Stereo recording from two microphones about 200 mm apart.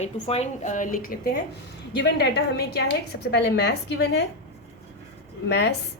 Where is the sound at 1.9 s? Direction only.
55° left (ahead or behind).